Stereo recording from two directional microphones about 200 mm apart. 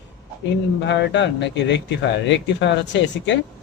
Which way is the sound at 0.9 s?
60° left (ahead or behind).